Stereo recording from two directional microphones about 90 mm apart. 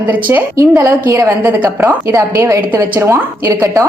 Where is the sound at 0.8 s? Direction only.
35° right (ahead or behind).